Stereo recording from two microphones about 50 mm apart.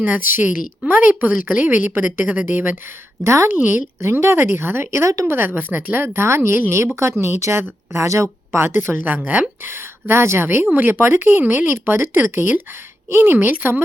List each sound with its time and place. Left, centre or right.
0.0 s a woman's voice: right
3.2 s speech: right
5.2 s a woman's voice: right
7.2 s speech: right
8.6 s a woman's voice: right
9.6 s a woman's voice: right